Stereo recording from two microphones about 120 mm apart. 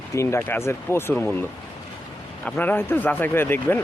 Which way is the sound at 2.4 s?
10° left (ahead or behind).